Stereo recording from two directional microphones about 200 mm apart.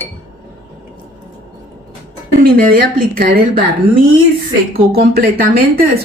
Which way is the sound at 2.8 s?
45° right (ahead or behind).